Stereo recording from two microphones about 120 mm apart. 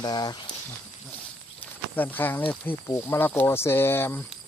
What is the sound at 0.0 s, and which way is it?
Speech, 35° left (ahead or behind).